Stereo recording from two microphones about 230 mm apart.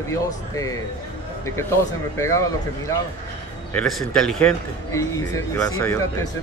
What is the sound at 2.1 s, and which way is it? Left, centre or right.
Speech, centre.